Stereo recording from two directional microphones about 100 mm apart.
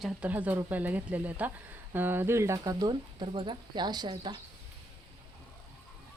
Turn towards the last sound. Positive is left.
turn(degrees=-50)  # may be behind; listen again after turning